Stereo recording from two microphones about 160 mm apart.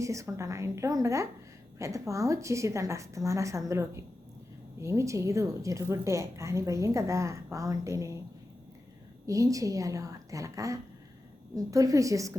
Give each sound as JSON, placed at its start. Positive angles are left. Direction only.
{"t": 0.0, "sound": "a woman's voice", "side_deg": -20}
{"t": 9.2, "sound": "a woman's voice", "side_deg": -20}